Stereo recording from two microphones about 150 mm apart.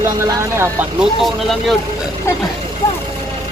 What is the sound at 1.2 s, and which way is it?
Speech, centre (ahead or behind).